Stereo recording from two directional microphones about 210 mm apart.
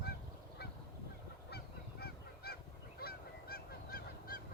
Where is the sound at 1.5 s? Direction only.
50° left (ahead or behind).